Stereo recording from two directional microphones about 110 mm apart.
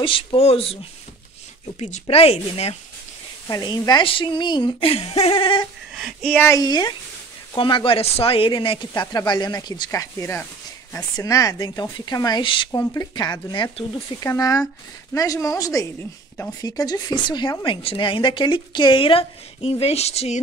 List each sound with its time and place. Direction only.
0.0 s speech: 55° left (ahead or behind)
1.8 s speech: 80° left; by 2.7 s 65° left (ahead or behind)
3.4 s speech: 35° left (ahead or behind)
4.0 s a woman's voice: 50° left (ahead or behind)
6.6 s a woman's voice: 40° left (ahead or behind)
9.0 s speech: 35° left (ahead or behind)
9.8 s speech: 25° left (ahead or behind); by 12.6 s 45° left (ahead or behind)
12.7 s a woman's voice: 30° left (ahead or behind); by 20.3 s 75° left (ahead or behind)